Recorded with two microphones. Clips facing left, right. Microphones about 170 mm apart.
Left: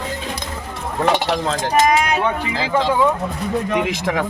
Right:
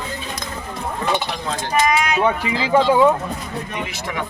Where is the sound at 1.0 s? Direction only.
80° left.